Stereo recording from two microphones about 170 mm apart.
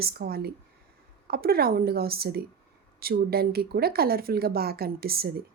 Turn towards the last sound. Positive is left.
turn(degrees=-65)  # may be behind; listen again after turning